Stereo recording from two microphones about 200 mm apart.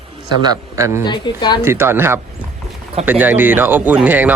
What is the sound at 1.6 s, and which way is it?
Speech, 10° right (ahead or behind).